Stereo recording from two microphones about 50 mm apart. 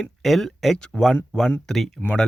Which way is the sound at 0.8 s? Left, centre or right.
Left.